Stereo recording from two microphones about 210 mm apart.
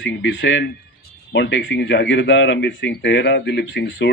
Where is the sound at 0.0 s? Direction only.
60° left (ahead or behind).